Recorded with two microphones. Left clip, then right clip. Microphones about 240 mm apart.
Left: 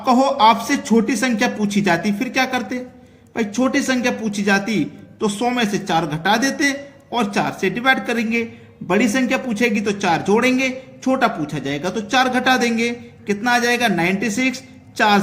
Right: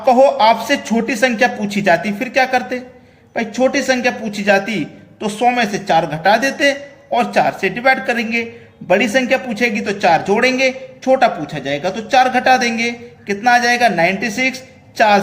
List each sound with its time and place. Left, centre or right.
0.0 s a man's voice: left